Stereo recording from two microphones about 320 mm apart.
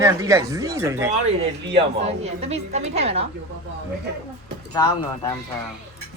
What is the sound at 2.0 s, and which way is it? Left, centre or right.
A woman's voice, centre.